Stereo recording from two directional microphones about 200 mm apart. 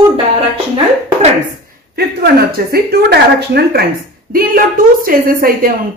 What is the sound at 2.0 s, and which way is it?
A woman's voice, 50° right (ahead or behind).